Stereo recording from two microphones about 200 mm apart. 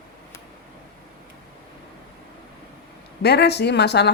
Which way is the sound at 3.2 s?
55° left (ahead or behind).